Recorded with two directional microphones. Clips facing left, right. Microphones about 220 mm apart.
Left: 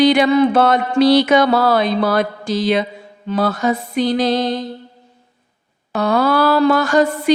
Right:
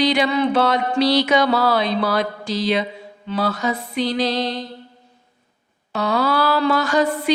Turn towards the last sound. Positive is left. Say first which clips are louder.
# left 4 dB
turn(degrees=45)  # may be behind; listen again after turning